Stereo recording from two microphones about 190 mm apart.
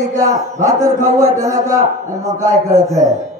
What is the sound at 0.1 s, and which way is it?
A man's voice, 15° right (ahead or behind).